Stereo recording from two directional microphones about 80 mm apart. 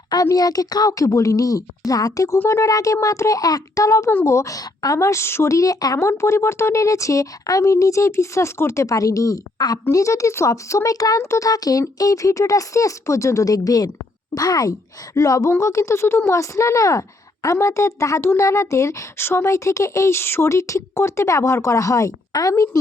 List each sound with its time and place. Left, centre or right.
0.1 s a woman's voice: left